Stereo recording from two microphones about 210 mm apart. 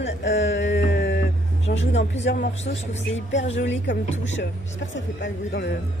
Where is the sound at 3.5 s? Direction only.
60° left (ahead or behind).